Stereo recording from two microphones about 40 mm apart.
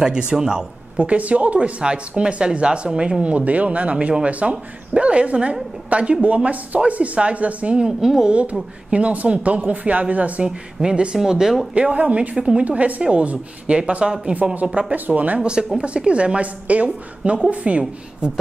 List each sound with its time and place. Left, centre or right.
0.0 s speech: right
1.0 s a woman's voice: right
8.0 s speech: centre
8.3 s a woman's voice: right
10.4 s speech: centre
11.7 s a woman's voice: right
14.7 s speech: right
15.0 s a woman's voice: right
16.1 s a woman's voice: right